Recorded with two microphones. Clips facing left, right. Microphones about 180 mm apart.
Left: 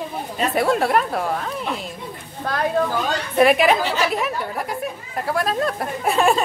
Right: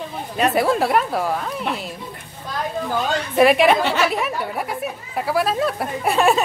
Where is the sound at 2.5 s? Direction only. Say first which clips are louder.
Left 3 dB; 65° left (ahead or behind).